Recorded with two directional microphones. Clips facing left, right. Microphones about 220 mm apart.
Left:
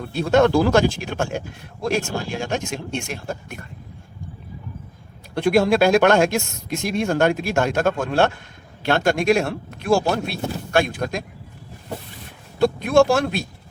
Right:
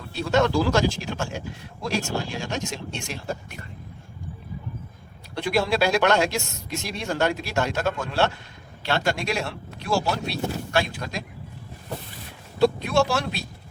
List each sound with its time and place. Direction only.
0.0 s speech: 55° left (ahead or behind)
5.3 s speech: 50° left (ahead or behind)
12.5 s speech: 50° left (ahead or behind)